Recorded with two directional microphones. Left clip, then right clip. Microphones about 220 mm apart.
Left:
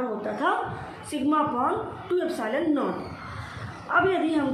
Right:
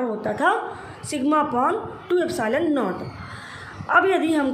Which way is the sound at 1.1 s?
45° right (ahead or behind).